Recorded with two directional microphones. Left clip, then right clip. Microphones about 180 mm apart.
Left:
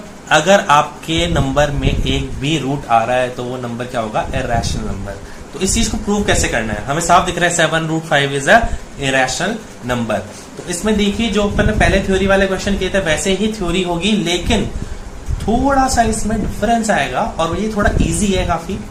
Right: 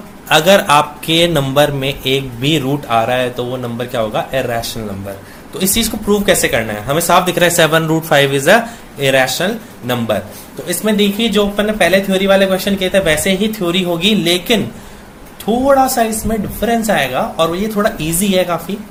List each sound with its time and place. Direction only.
0.3 s speech: 55° right (ahead or behind)
15.6 s speech: 45° right (ahead or behind)